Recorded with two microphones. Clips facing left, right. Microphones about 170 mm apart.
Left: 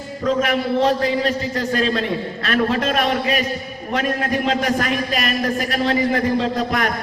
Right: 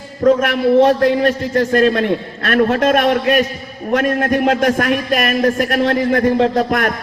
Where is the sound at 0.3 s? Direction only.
55° right (ahead or behind).